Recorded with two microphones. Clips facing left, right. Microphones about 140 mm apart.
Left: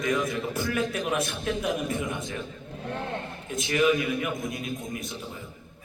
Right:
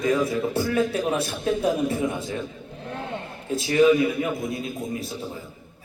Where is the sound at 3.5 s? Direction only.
30° right (ahead or behind).